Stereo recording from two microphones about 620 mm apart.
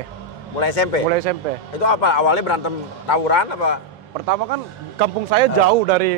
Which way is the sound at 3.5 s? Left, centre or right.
Left.